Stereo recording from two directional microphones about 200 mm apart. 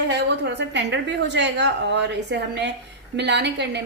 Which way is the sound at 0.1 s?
60° right (ahead or behind).